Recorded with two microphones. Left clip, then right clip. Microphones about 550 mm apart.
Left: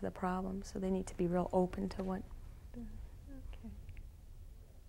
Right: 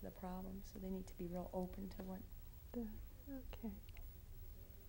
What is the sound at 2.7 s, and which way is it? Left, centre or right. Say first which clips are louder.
Speech: right 4 dB; right.